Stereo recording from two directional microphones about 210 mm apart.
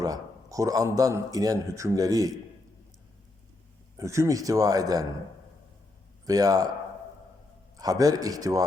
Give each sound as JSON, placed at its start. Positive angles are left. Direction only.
{"t": 0.0, "sound": "a man's voice", "side_deg": -15}
{"t": 3.9, "sound": "a man's voice", "side_deg": -15}
{"t": 6.2, "sound": "a man's voice", "side_deg": -15}
{"t": 7.8, "sound": "a man's voice", "side_deg": -15}